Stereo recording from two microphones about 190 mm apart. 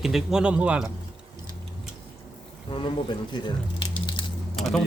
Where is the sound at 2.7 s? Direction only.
25° left (ahead or behind).